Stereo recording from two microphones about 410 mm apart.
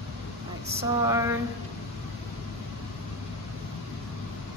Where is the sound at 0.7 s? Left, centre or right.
Centre.